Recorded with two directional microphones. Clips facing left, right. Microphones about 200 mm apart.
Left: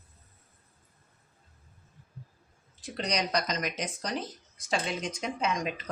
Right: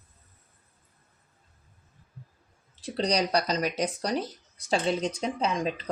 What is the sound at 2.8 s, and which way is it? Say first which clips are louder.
Speech: right 5 dB; 30° right (ahead or behind).